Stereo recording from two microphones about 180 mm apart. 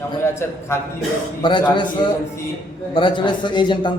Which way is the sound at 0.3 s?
15° left (ahead or behind).